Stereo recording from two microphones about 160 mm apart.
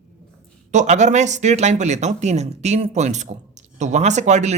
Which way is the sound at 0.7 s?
45° right (ahead or behind).